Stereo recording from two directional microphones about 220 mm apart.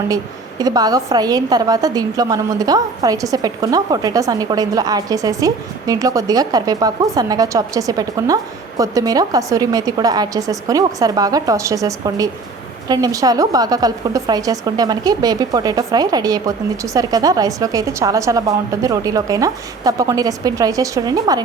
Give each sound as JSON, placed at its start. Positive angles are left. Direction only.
{"t": 0.6, "sound": "a woman's voice", "side_deg": -15}